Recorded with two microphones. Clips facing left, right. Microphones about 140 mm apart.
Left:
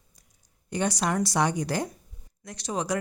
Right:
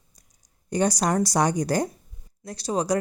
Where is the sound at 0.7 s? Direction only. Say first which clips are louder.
Right 4 dB; 40° right (ahead or behind).